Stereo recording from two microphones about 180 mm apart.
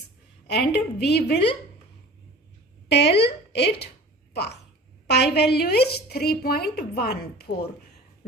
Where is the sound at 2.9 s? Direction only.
70° left (ahead or behind).